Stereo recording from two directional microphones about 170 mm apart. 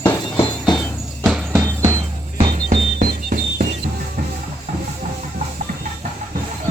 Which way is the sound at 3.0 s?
55° right (ahead or behind).